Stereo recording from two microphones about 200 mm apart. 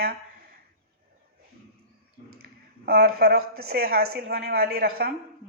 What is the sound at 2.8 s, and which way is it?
A woman's voice, 50° right (ahead or behind).